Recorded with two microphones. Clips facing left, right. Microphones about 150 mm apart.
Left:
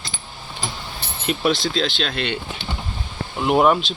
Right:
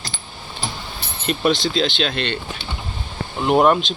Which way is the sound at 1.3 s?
Centre (ahead or behind).